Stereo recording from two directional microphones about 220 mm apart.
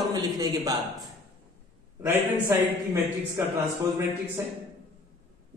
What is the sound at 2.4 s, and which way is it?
Speech, 10° right (ahead or behind).